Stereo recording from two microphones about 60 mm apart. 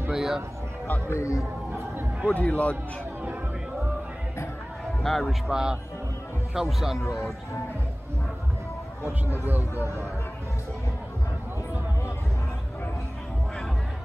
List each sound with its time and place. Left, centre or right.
0.1 s a sound: centre
1.1 s speech: left
2.3 s speech: left
5.0 s a man's voice: centre
5.5 s speech: centre
9.4 s speech: right